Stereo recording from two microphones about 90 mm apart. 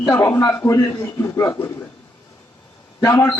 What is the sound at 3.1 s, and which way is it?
Speech, 40° left (ahead or behind).